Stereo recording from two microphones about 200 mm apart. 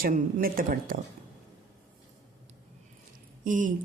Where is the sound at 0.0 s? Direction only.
40° right (ahead or behind).